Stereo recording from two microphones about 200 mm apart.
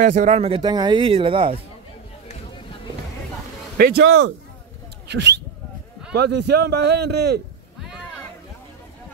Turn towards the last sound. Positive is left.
turn(degrees=-55)  # may be behind; listen again after turning